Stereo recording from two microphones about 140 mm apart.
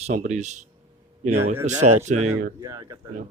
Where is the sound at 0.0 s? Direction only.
60° right (ahead or behind).